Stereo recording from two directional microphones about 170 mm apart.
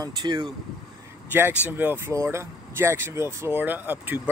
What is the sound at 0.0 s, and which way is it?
Speech, 25° right (ahead or behind).